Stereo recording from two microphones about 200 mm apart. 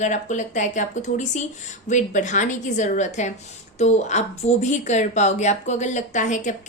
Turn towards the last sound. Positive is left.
turn(degrees=35)  # may be behind; listen again after turning